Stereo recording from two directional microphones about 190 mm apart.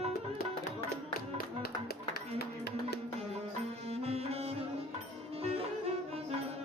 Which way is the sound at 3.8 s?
30° right (ahead or behind).